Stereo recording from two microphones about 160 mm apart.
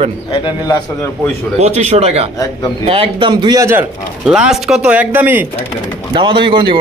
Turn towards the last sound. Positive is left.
turn(degrees=-30)  # may be behind; listen again after turning